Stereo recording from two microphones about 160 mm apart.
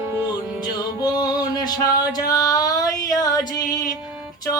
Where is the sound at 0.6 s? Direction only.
25° left (ahead or behind).